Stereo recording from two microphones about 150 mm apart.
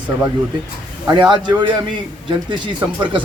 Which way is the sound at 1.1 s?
30° right (ahead or behind).